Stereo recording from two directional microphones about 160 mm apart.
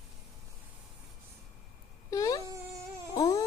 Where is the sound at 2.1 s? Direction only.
20° left (ahead or behind).